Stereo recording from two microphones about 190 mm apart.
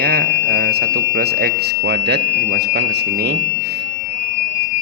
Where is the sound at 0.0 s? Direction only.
60° right (ahead or behind).